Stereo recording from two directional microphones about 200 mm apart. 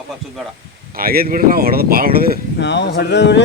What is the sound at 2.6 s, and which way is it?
Speech, 60° left (ahead or behind).